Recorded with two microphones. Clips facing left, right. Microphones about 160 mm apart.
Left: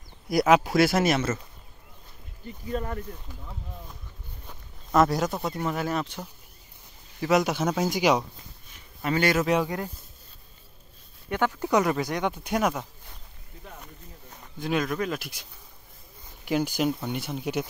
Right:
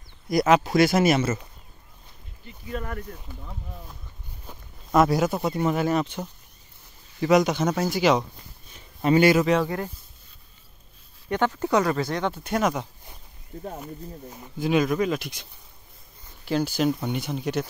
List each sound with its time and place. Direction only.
0.3 s speech: 5° left (ahead or behind)
2.4 s speech: 45° left (ahead or behind)
4.5 s speech: 5° right (ahead or behind); by 8.2 s 10° left (ahead or behind)
9.0 s a man's voice: 25° right (ahead or behind)
9.4 s speech: 10° left (ahead or behind)
11.2 s speech: 10° left (ahead or behind)
13.5 s speech: 45° right (ahead or behind)
14.3 s speech: 10° right (ahead or behind)
16.4 s speech: 15° left (ahead or behind)
17.0 s speech: centre (ahead or behind)